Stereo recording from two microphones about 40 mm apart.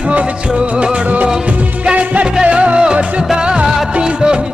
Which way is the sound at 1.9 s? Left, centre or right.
Right.